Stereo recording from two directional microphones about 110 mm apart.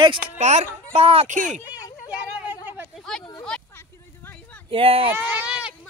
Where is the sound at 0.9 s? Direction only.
65° right (ahead or behind).